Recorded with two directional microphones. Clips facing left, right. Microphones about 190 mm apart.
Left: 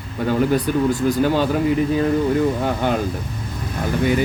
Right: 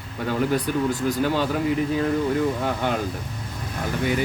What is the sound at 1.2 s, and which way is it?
Speech, 40° left (ahead or behind).